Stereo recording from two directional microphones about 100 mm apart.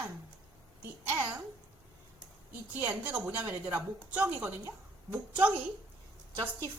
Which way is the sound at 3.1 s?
20° right (ahead or behind).